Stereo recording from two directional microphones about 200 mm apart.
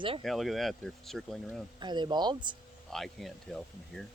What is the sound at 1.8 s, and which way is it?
Speech, 20° right (ahead or behind).